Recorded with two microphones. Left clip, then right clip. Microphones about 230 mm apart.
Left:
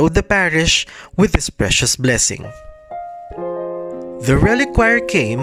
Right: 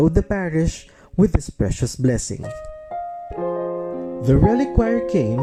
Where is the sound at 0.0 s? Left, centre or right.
Left.